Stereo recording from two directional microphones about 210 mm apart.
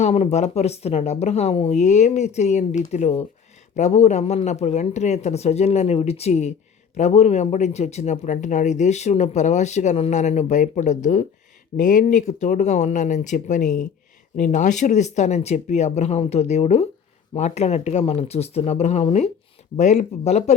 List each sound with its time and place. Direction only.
0.0 s speech: 30° left (ahead or behind)